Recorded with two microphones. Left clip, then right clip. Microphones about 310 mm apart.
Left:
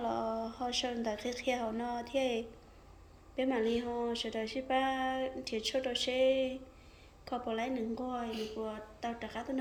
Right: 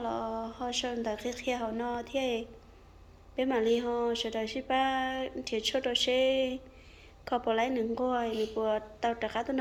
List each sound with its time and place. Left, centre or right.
0.0 s a woman's voice: centre